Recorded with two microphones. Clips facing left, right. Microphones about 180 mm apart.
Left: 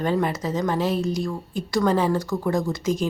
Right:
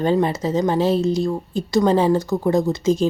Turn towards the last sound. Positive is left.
turn(degrees=-25)  # may be behind; listen again after turning